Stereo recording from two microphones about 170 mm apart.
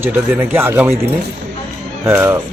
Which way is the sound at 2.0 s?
15° right (ahead or behind).